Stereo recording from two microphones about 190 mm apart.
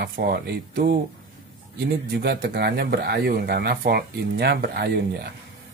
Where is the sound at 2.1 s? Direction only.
60° right (ahead or behind).